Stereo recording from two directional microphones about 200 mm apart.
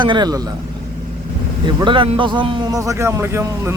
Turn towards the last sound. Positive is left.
turn(degrees=-15)  # may be behind; listen again after turning